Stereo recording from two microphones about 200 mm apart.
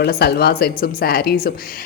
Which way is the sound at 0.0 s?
55° left (ahead or behind).